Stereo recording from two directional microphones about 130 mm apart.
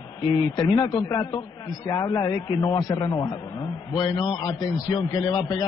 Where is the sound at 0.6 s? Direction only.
35° left (ahead or behind).